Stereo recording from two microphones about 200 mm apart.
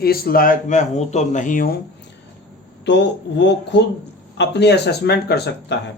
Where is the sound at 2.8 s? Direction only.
60° left (ahead or behind).